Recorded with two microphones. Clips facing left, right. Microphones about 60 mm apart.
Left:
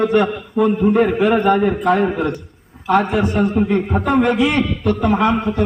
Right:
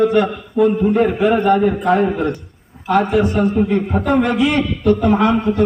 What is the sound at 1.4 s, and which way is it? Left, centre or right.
Speech, left.